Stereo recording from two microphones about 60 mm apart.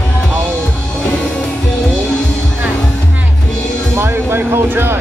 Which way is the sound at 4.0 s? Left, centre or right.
Right.